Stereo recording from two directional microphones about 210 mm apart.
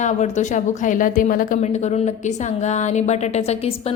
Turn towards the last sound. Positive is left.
turn(degrees=30)  # may be behind; listen again after turning